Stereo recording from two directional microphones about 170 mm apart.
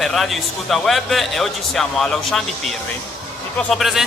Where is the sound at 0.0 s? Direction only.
Centre (ahead or behind).